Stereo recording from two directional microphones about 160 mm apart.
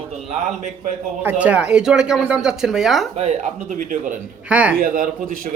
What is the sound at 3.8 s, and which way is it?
Speech, 55° right (ahead or behind).